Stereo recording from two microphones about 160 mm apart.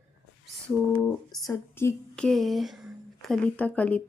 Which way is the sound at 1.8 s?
15° left (ahead or behind).